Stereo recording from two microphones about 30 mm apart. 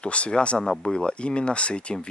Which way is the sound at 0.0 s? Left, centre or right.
Left.